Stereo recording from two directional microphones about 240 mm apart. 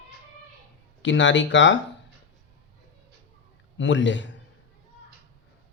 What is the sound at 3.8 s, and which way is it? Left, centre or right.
Speech, left.